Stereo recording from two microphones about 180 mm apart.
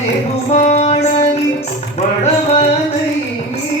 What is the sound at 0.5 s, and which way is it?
Music, 40° left (ahead or behind).